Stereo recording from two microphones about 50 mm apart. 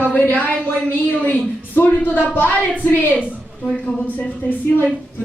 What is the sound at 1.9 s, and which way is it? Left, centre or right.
Speech, left.